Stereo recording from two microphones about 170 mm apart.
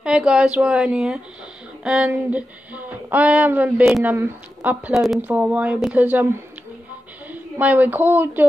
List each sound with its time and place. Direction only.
0.0 s speech: 5° right (ahead or behind)
7.2 s a woman's voice: 10° right (ahead or behind)